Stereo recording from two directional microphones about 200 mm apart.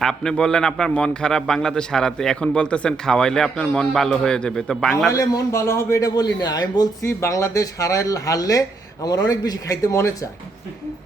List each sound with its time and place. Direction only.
0.0 s a man's voice: centre (ahead or behind)
5.1 s a man's voice: 15° left (ahead or behind)